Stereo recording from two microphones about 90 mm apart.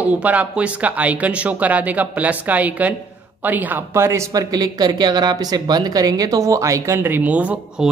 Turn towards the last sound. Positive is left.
turn(degrees=-15)  # may be behind; listen again after turning